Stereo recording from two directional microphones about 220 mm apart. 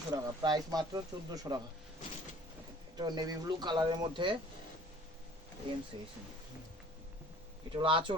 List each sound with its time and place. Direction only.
0.1 s speech: 20° right (ahead or behind)
2.9 s a man's voice: 20° right (ahead or behind)
5.7 s a man's voice: 20° right (ahead or behind)
7.8 s a man's voice: 25° right (ahead or behind)